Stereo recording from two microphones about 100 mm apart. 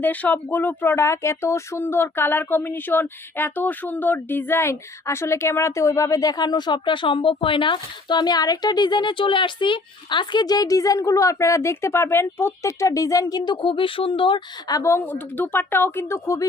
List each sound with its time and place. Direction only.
0.0 s speech: 15° left (ahead or behind); by 14.4 s 55° left (ahead or behind)
14.7 s speech: 30° left (ahead or behind)